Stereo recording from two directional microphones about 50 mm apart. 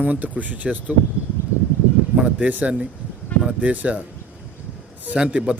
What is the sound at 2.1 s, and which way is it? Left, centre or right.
Speech, right.